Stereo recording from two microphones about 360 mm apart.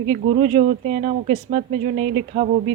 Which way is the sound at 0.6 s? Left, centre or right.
Right.